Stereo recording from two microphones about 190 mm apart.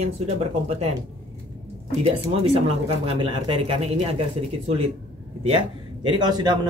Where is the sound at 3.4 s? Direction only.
30° right (ahead or behind).